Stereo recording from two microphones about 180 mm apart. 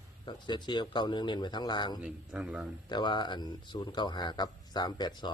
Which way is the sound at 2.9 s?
25° left (ahead or behind).